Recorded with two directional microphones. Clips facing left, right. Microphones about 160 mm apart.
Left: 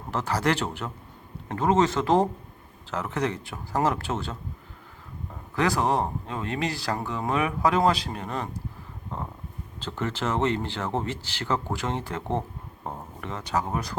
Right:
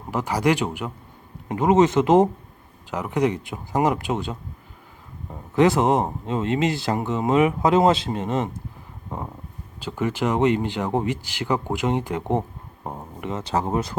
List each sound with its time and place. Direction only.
0.1 s speech: 15° right (ahead or behind)
5.5 s speech: 20° right (ahead or behind)
13.4 s speech: 30° right (ahead or behind)